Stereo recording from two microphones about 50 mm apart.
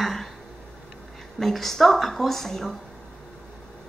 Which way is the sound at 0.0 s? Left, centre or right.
Centre.